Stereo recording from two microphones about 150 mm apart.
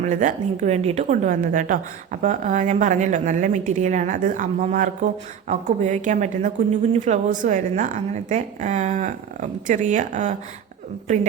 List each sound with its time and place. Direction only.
0.0 s a woman's voice: 55° right (ahead or behind)